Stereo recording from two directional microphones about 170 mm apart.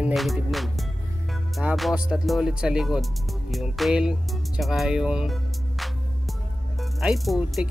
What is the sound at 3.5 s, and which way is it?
Speech, centre (ahead or behind).